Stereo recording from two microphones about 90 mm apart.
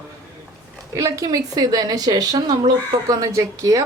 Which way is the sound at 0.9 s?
40° right (ahead or behind).